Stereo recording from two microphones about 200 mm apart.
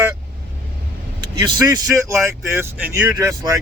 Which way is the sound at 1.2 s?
25° right (ahead or behind).